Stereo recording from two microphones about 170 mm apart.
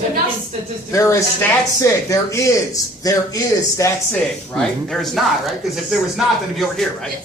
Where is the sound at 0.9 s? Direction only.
15° left (ahead or behind).